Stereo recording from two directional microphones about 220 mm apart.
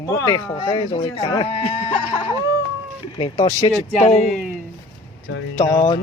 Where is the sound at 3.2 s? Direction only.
20° left (ahead or behind).